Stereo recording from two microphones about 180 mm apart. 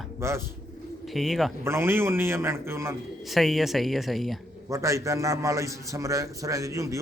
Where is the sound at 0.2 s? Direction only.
15° right (ahead or behind).